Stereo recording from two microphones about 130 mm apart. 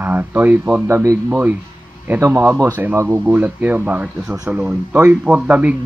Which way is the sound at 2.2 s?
25° right (ahead or behind).